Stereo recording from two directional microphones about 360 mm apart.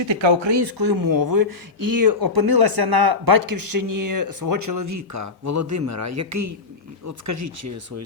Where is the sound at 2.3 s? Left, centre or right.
Right.